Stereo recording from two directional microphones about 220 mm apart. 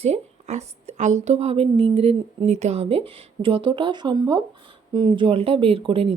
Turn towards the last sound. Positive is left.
turn(degrees=-25)  # may be behind; listen again after turning